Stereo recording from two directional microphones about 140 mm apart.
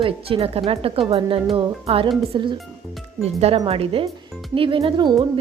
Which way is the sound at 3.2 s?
45° right (ahead or behind).